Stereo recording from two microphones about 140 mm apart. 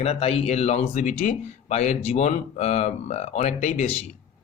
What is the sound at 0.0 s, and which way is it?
Speech, 45° left (ahead or behind).